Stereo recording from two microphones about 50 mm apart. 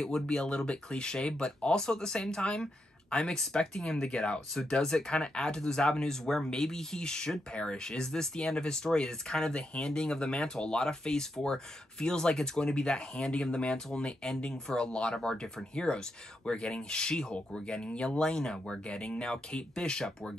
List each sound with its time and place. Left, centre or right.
0.0 s speech: centre